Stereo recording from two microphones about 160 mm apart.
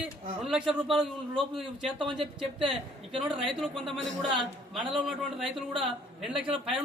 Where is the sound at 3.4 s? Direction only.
Centre (ahead or behind).